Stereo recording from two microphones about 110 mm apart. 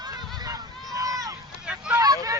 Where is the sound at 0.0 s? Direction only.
40° right (ahead or behind).